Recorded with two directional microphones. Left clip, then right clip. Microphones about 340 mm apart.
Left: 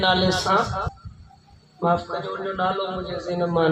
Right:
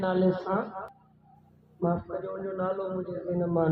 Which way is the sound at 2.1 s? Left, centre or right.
Left.